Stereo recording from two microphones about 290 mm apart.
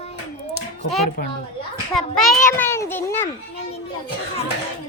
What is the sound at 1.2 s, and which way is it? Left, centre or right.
Speech, left.